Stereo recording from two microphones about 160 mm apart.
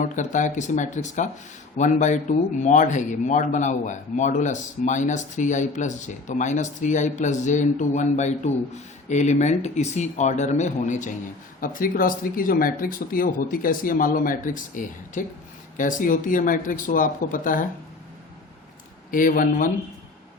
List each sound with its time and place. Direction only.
0.0 s speech: 50° left (ahead or behind)
19.1 s speech: 55° left (ahead or behind)